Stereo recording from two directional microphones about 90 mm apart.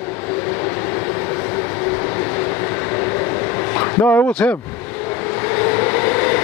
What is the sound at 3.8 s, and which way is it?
Vehicle, 25° left (ahead or behind).